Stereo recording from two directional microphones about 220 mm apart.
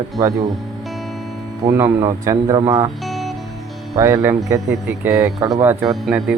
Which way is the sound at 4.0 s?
10° right (ahead or behind).